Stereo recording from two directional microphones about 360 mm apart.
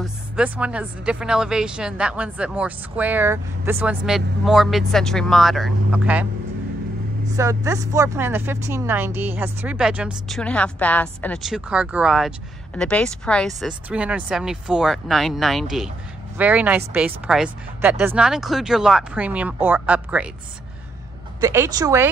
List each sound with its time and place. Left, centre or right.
0.0 s speech: centre
7.3 s speech: centre
21.4 s speech: centre